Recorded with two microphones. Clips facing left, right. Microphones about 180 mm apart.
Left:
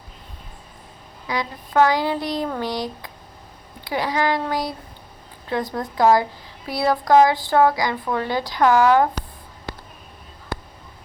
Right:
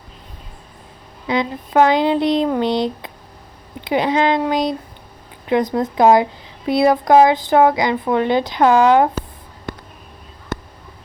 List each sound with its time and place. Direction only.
1.3 s speech: 20° right (ahead or behind)